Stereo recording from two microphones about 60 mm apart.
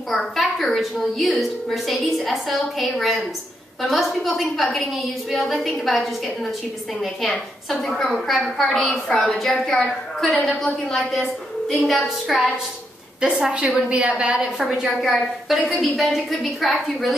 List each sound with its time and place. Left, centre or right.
0.1 s a woman's voice: centre
8.5 s a woman's voice: centre
13.2 s a woman's voice: centre
14.4 s a woman's voice: centre